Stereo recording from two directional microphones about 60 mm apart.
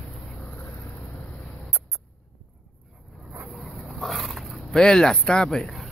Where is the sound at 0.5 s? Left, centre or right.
Left.